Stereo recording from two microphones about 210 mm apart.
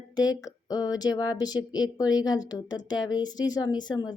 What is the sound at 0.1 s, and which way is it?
Speech, 15° left (ahead or behind).